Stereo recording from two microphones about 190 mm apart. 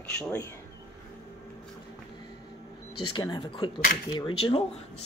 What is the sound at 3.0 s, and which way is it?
Speech, 25° left (ahead or behind).